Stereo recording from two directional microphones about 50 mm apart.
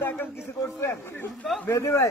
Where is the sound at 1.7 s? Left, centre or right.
Left.